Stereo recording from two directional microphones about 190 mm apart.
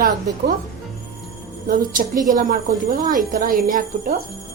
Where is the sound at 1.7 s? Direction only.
45° right (ahead or behind).